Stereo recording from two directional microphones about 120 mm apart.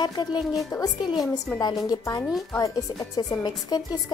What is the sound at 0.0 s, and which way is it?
A woman's voice, 35° left (ahead or behind).